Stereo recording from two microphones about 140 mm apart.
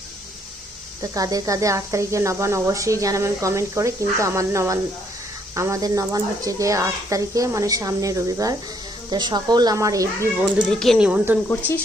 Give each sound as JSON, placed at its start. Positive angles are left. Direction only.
{"t": 1.1, "sound": "speech", "side_deg": -25}
{"t": 10.7, "sound": "speech", "side_deg": 5}